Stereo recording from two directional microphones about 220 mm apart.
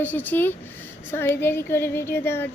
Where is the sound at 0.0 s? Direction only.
10° left (ahead or behind).